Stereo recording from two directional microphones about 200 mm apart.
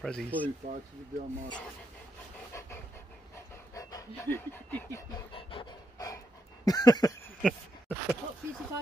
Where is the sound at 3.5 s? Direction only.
15° left (ahead or behind).